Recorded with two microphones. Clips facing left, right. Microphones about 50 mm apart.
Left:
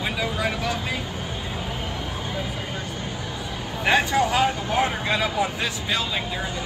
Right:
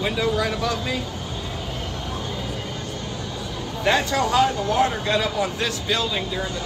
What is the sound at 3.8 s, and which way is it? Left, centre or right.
Speech, centre.